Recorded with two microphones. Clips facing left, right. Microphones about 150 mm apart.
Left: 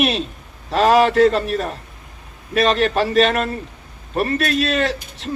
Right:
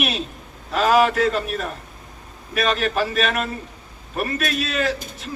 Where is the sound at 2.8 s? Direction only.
30° left (ahead or behind).